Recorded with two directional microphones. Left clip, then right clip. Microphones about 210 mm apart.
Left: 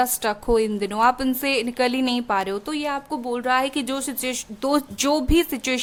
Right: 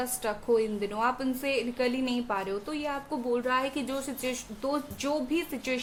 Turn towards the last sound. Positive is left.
turn(degrees=50)  # may be behind; listen again after turning